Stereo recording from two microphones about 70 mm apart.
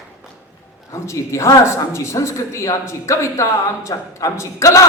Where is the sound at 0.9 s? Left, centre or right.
Left.